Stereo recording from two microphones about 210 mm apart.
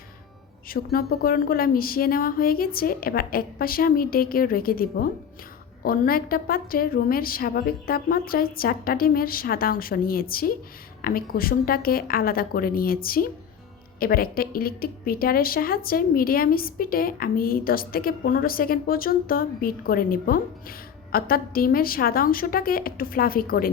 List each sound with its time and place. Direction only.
0.7 s speech: 45° left (ahead or behind)